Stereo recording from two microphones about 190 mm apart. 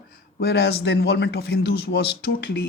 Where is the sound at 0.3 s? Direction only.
60° left (ahead or behind).